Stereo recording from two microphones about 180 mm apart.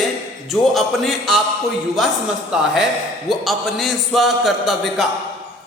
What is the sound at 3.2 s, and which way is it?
A man's voice, centre (ahead or behind).